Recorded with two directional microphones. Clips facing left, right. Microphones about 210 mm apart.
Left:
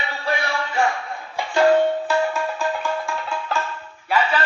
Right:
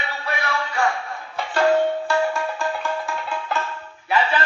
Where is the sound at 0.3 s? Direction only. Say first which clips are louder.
Left 2 dB; 25° left (ahead or behind).